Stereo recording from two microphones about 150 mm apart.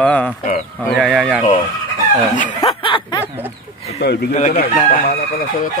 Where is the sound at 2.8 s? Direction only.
35° left (ahead or behind).